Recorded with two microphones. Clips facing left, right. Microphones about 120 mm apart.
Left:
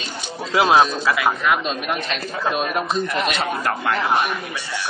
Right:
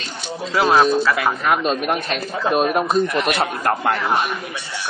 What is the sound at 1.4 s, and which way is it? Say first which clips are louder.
Speech: right 2 dB; 35° right (ahead or behind).